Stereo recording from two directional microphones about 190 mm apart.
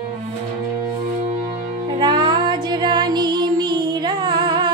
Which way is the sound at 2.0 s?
25° right (ahead or behind).